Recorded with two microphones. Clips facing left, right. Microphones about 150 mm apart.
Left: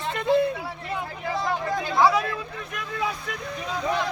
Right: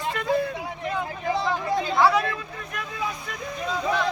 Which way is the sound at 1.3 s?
25° right (ahead or behind).